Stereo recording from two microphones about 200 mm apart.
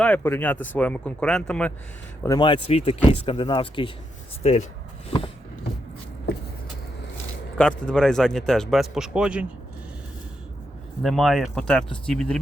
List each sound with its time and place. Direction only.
0.0 s speech: 10° left (ahead or behind)
2.2 s speech: 20° left (ahead or behind)
7.9 s speech: 5° left (ahead or behind)
11.0 s speech: centre (ahead or behind)